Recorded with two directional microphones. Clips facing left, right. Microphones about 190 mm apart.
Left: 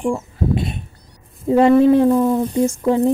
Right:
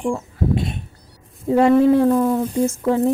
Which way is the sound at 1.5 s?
25° left (ahead or behind).